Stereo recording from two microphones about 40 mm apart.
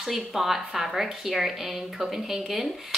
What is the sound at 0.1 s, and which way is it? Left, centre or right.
Speech, centre.